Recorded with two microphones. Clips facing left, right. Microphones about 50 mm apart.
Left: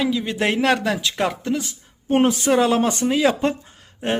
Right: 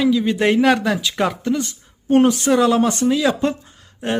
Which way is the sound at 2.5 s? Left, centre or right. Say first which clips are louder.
Right 2 dB; left.